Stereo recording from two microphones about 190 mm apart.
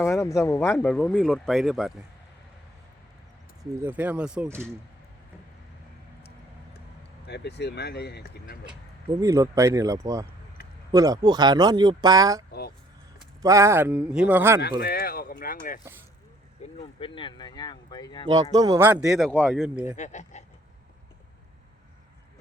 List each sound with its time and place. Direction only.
0.0 s speech: 15° left (ahead or behind); by 1.9 s centre (ahead or behind)
3.6 s speech: 10° right (ahead or behind)
7.3 s speech: 60° left (ahead or behind)
9.2 s speech: 20° right (ahead or behind)
12.5 s a sound: 55° left (ahead or behind)
13.4 s speech: 15° right (ahead or behind)
14.8 s speech: 55° left (ahead or behind)
16.7 s speech: 25° left (ahead or behind)
18.5 s speech: 20° right (ahead or behind)
20.0 s speech: 40° left (ahead or behind)